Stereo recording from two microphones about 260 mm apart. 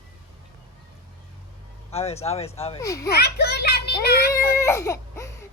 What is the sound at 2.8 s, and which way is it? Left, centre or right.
Baby laughter, centre.